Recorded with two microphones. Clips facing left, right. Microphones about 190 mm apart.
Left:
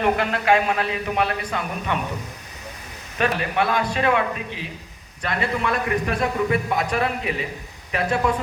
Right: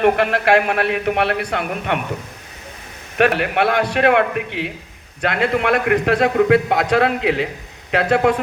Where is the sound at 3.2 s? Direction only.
65° right (ahead or behind).